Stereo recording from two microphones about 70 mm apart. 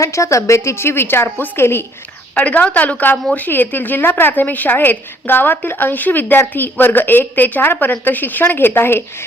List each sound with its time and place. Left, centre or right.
0.0 s a woman's voice: left
2.3 s a woman's voice: centre